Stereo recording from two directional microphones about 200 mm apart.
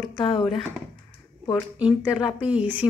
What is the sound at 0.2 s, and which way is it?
Speech, 25° left (ahead or behind).